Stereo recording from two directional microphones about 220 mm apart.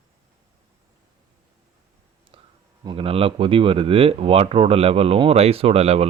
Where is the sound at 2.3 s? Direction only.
25° right (ahead or behind).